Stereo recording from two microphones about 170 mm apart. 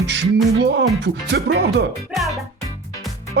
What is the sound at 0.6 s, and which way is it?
Speech, 90° right.